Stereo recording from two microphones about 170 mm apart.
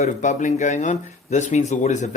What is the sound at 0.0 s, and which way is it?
Speech, 45° left (ahead or behind).